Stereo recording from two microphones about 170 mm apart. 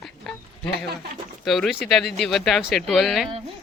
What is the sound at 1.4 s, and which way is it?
Speech, centre (ahead or behind).